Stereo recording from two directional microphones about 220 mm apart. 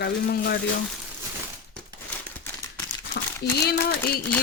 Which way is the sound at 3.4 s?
45° left (ahead or behind).